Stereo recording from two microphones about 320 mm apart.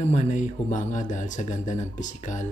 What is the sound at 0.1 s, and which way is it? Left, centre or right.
Speech, left.